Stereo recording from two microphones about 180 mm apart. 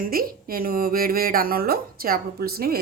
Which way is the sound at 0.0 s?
55° right (ahead or behind).